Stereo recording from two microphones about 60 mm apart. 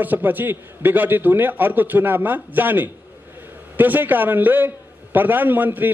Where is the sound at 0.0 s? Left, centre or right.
Right.